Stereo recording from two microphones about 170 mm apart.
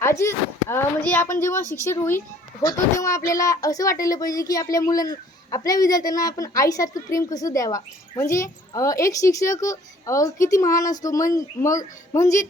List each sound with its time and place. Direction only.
0.0 s a woman's voice: 15° left (ahead or behind)